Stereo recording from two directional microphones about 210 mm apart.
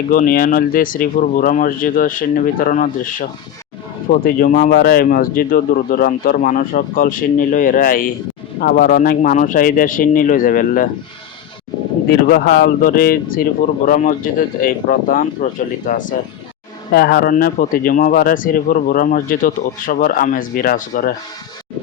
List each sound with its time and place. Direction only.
0.1 s speech: 40° left (ahead or behind)
12.3 s speech: 45° left (ahead or behind)